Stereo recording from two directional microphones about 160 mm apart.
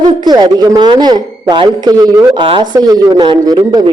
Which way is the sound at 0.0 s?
25° right (ahead or behind).